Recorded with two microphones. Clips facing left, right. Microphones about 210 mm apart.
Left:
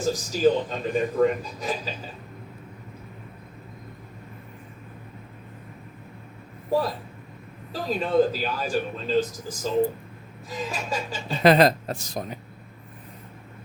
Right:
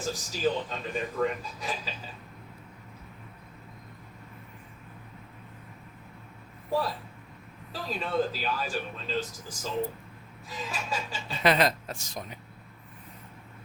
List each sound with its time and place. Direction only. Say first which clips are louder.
0.0 s speech: left 8 dB; 40° left (ahead or behind)
6.7 s speech: left 5 dB; 45° left (ahead or behind)